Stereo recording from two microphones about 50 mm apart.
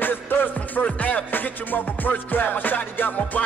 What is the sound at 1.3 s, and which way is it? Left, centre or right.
Music, left.